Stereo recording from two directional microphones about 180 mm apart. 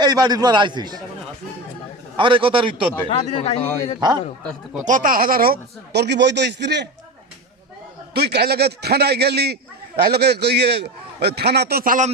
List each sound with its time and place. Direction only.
0.0 s a man's voice: 20° right (ahead or behind)
2.1 s a man's voice: 30° right (ahead or behind)
3.1 s speech: 35° left (ahead or behind)
4.9 s speech: 50° right (ahead or behind); by 6.8 s 75° right (ahead or behind)
8.1 s a man's voice: 65° right (ahead or behind); by 12.1 s 45° right (ahead or behind)